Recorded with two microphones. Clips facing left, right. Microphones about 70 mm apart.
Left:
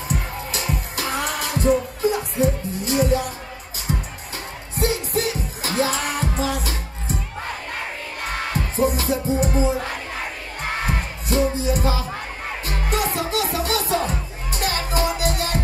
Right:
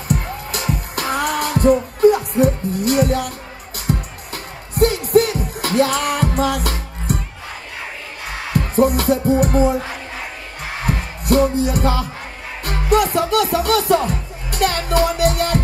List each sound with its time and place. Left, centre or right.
0.1 s music: right
8.5 s music: right
10.9 s music: right